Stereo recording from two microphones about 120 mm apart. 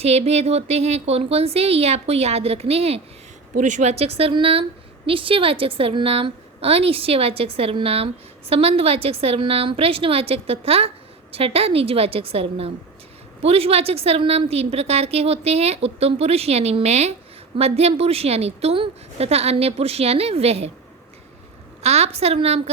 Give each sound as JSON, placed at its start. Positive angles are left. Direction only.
{"t": 0.0, "sound": "a woman's voice", "side_deg": -60}
{"t": 3.6, "sound": "a woman's voice", "side_deg": -80}
{"t": 21.8, "sound": "a woman's voice", "side_deg": -65}